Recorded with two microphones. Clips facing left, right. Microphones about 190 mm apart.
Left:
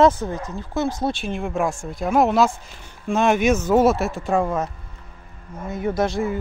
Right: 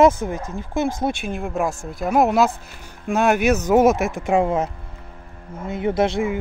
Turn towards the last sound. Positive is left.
turn(degrees=-25)  # may be behind; listen again after turning